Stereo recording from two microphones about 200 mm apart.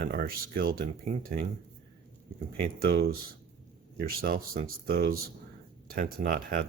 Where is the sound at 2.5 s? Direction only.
50° right (ahead or behind).